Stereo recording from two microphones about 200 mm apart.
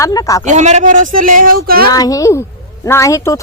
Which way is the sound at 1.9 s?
20° left (ahead or behind).